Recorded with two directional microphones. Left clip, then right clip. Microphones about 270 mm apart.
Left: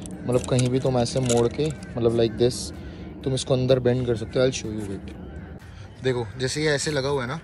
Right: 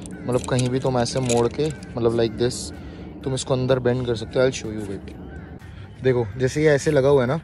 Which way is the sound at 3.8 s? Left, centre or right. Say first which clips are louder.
Right 1 dB; right.